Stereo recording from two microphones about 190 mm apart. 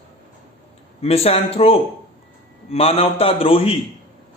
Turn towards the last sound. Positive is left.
turn(degrees=30)  # may be behind; listen again after turning